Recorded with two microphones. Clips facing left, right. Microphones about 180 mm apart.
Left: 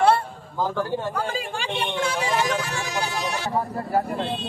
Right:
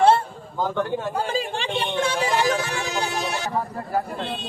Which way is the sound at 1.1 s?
25° right (ahead or behind).